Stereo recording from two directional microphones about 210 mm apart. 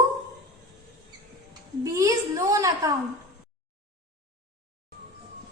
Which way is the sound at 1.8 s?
15° right (ahead or behind).